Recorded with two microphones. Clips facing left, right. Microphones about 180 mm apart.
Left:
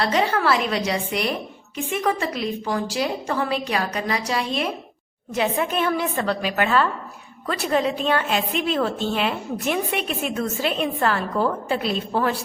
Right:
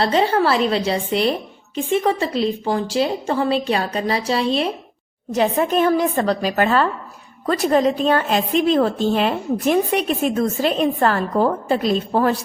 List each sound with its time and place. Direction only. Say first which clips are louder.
0.0 s a woman's voice: right 4 dB; 30° right (ahead or behind)
5.3 s a woman's voice: right 5 dB; 40° right (ahead or behind)